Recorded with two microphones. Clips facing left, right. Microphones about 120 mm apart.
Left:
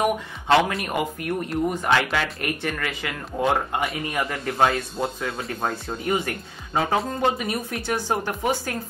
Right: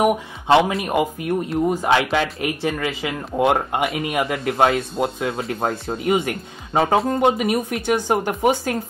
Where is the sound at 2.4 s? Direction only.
20° right (ahead or behind).